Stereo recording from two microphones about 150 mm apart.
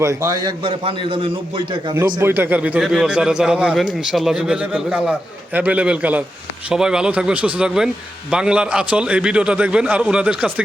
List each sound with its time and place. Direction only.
0.0 s a man's voice: 20° right (ahead or behind)
2.2 s a man's voice: 15° right (ahead or behind)